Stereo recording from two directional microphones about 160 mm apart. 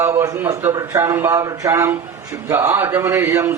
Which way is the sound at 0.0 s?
20° right (ahead or behind).